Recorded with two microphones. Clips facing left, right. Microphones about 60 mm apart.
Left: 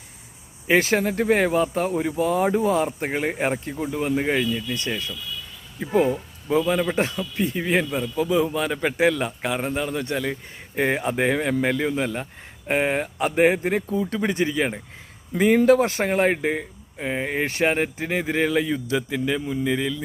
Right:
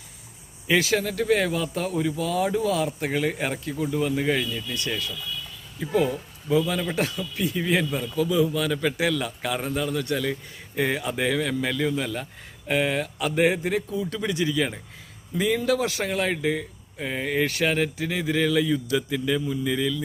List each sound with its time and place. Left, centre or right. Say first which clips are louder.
0.7 s speech: left 3 dB; left
4.4 s speech: left 4 dB; centre
4.9 s speech: left 1 dB; left
15.3 s speech: left 7 dB; left
17.0 s speech: even; left